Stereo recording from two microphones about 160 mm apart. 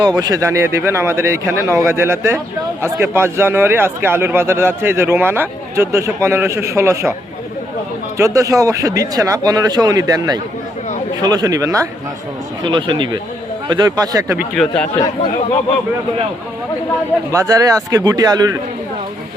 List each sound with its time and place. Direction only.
0.0 s a man's voice: 25° right (ahead or behind)
8.2 s speech: 20° right (ahead or behind)
14.5 s speech: 5° left (ahead or behind)
17.3 s speech: 20° right (ahead or behind)